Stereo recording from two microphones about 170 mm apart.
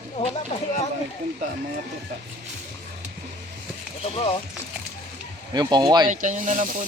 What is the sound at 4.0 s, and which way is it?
Speech, 35° left (ahead or behind).